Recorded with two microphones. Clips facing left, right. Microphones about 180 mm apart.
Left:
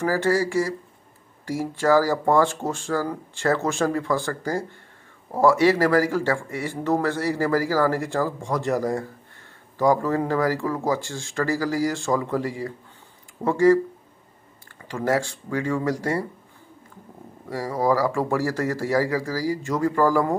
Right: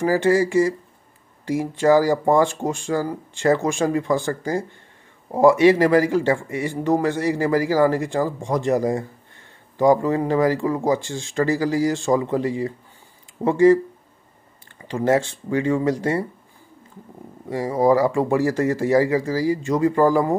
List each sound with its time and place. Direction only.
0.0 s speech: 20° right (ahead or behind)
14.9 s speech: 20° right (ahead or behind)
17.5 s speech: 20° right (ahead or behind)